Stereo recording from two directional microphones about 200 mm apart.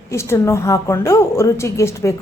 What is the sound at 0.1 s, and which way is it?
A woman's voice, 15° left (ahead or behind).